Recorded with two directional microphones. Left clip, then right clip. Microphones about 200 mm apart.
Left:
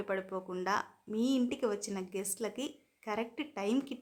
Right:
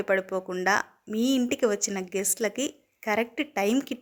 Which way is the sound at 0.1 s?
20° right (ahead or behind).